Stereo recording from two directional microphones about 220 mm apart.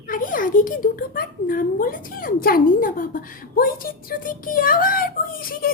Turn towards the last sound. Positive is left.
turn(degrees=40)  # may be behind; listen again after turning